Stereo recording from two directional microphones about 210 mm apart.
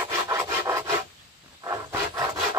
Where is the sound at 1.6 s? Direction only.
15° right (ahead or behind).